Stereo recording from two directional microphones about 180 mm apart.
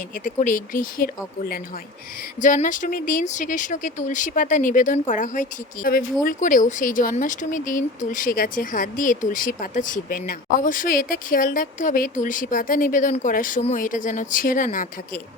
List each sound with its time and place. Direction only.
0.3 s speech: 50° left (ahead or behind)
2.4 s speech: 45° left (ahead or behind)